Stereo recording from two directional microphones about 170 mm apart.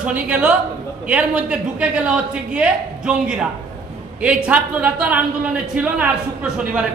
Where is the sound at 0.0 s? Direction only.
10° right (ahead or behind).